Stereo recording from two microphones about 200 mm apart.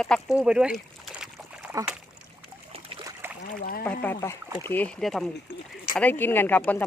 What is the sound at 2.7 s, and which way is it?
Boat, 25° right (ahead or behind).